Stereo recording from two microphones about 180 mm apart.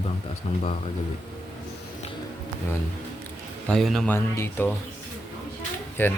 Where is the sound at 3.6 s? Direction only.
5° left (ahead or behind).